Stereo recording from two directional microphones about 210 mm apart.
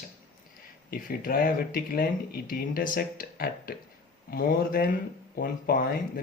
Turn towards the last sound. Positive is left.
turn(degrees=45)  # may be behind; listen again after turning